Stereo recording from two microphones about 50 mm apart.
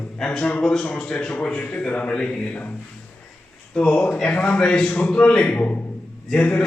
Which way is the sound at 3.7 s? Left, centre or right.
Left.